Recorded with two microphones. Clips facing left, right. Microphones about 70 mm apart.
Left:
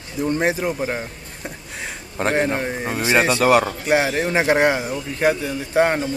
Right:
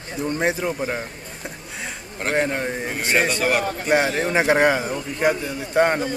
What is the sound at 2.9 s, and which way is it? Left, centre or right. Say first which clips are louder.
Speech: left 4 dB; left.